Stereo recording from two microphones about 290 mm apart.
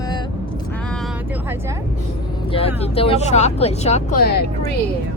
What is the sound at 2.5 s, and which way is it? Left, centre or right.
Speech, centre.